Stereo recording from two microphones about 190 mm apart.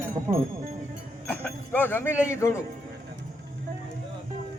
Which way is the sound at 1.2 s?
10° left (ahead or behind).